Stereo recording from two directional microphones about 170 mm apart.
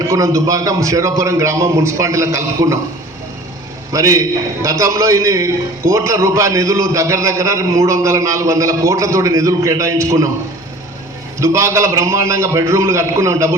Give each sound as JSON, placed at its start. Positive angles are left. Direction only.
{"t": 0.1, "sound": "a man's voice", "side_deg": -20}
{"t": 3.9, "sound": "a man's voice", "side_deg": -20}
{"t": 11.3, "sound": "a man's voice", "side_deg": -15}